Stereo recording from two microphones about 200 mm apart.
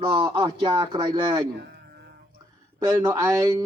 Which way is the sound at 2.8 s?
15° right (ahead or behind).